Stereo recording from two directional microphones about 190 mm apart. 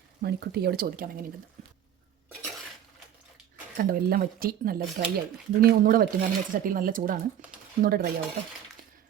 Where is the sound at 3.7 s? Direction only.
50° right (ahead or behind).